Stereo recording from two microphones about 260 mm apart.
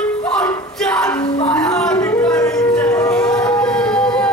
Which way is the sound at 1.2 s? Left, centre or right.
Centre.